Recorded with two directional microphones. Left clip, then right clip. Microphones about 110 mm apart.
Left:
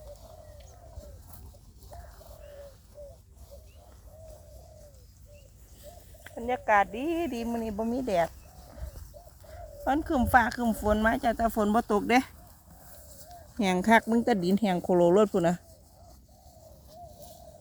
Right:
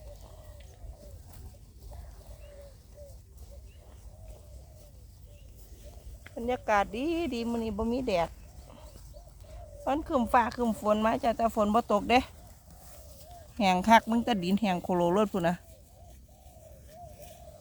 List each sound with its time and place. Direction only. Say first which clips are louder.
6.8 s speech: left 1 dB; 20° right (ahead or behind)
7.5 s speech: even; 5° right (ahead or behind)
9.8 s speech: left 2 dB; 10° left (ahead or behind)
13.0 s a sound: left 2 dB; 15° right (ahead or behind)
14.3 s speech: left 3 dB; 5° right (ahead or behind)
17.2 s bird: left 1 dB; 30° right (ahead or behind)